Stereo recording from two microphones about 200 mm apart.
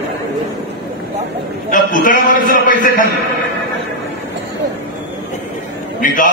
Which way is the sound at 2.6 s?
45° left (ahead or behind).